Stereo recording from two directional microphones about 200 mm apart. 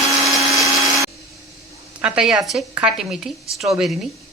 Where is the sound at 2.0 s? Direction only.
5° right (ahead or behind).